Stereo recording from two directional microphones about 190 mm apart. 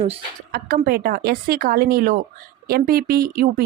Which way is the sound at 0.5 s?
55° right (ahead or behind).